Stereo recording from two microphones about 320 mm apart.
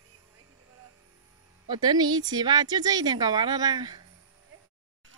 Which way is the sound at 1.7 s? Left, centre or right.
Centre.